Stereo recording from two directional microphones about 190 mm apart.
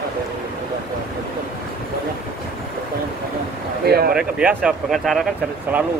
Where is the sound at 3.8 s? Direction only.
55° right (ahead or behind).